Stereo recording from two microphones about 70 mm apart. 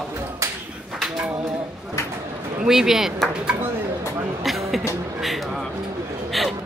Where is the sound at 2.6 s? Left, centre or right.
Centre.